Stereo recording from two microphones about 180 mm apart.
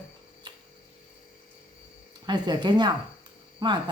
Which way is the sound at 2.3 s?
25° right (ahead or behind).